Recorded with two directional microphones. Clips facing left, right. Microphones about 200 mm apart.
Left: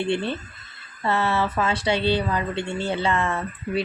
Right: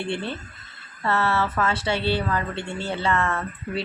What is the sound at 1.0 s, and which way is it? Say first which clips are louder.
A woman's voice: left 1 dB; 15° left (ahead or behind).